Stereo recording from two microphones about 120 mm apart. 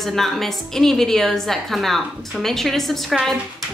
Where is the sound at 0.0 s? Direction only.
Centre (ahead or behind).